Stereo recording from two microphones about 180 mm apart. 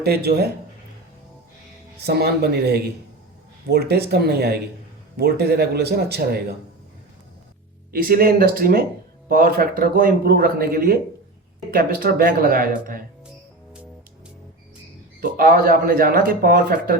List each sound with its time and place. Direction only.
0.0 s speech: 60° right (ahead or behind)
2.0 s speech: 65° right (ahead or behind)
7.9 s speech: 55° right (ahead or behind)
15.2 s speech: 55° right (ahead or behind)